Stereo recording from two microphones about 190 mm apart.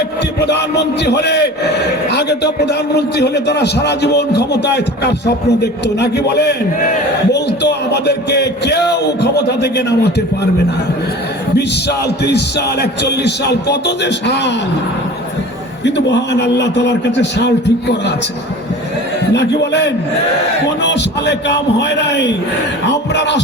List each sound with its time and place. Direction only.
0.3 s a man's voice: 60° left (ahead or behind)
11.5 s a man's voice: 60° left (ahead or behind)
15.8 s a man's voice: 65° left (ahead or behind)
19.3 s a man's voice: 65° left (ahead or behind)